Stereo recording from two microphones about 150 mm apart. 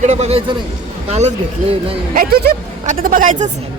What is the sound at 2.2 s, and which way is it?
A woman's voice, 80° right.